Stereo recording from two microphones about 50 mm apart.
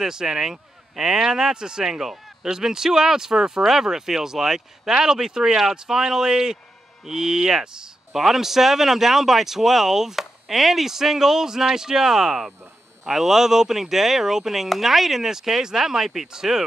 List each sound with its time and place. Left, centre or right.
0.0 s speech: centre